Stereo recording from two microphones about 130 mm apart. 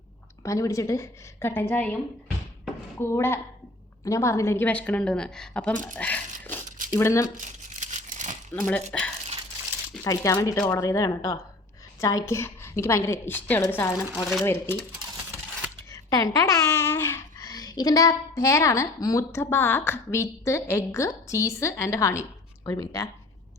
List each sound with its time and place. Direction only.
0.4 s a woman's voice: 25° left (ahead or behind)
3.0 s a woman's voice: 20° left (ahead or behind)
6.0 s a sound: 10° left (ahead or behind)
6.7 s a sound: 90° right
7.0 s a woman's voice: 25° left (ahead or behind)
7.8 s crumpling: 70° right (ahead or behind)
8.5 s a woman's voice: 10° left (ahead or behind)
10.0 s a woman's voice: 25° left (ahead or behind)
15.9 s speech: 25° left (ahead or behind)